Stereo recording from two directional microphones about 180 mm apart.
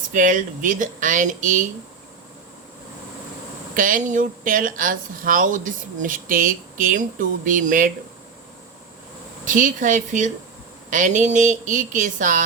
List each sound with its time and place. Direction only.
0.1 s speech: 45° right (ahead or behind)
3.8 s speech: 50° right (ahead or behind)
9.4 s speech: 45° right (ahead or behind)